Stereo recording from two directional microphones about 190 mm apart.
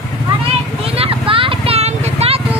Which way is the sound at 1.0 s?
30° right (ahead or behind).